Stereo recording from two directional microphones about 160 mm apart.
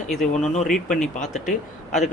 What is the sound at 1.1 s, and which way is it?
Speech, 50° left (ahead or behind).